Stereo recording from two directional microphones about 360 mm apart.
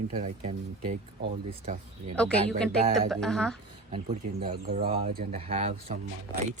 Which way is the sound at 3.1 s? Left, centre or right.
Centre.